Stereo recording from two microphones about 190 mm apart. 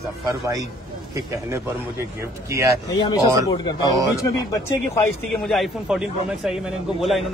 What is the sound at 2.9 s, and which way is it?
Speech, 25° left (ahead or behind).